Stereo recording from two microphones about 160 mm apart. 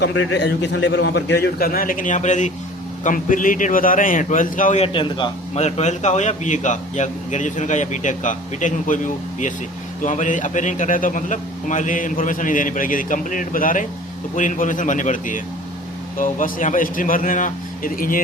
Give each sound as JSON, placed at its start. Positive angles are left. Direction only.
{"t": 0.0, "sound": "a man's voice", "side_deg": 90}
{"t": 4.9, "sound": "a man's voice", "side_deg": 30}
{"t": 5.5, "sound": "a man's voice", "side_deg": 45}
{"t": 10.0, "sound": "a man's voice", "side_deg": 50}